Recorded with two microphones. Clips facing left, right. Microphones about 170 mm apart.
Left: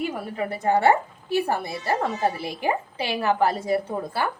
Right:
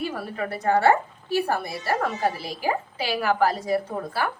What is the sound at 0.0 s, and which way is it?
A woman's voice, 20° left (ahead or behind).